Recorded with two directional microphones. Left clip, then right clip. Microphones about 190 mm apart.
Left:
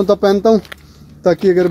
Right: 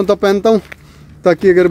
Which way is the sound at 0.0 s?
30° right (ahead or behind).